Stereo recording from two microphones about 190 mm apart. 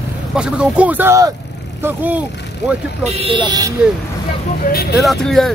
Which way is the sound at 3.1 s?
30° right (ahead or behind).